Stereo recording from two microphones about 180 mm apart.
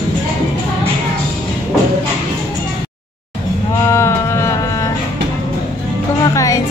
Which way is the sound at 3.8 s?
15° left (ahead or behind).